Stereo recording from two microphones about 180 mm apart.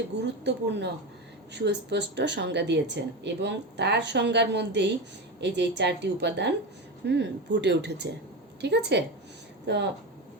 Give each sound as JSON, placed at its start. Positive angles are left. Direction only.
{"t": 0.4, "sound": "speech", "side_deg": -70}